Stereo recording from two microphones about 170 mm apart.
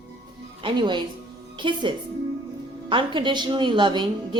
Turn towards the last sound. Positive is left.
turn(degrees=-30)  # may be behind; listen again after turning